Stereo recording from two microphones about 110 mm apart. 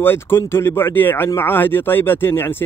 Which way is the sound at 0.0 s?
20° left (ahead or behind).